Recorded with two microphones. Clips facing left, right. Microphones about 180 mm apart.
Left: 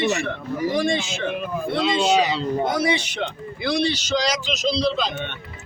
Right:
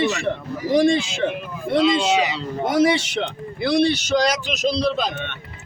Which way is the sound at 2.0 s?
35° left (ahead or behind).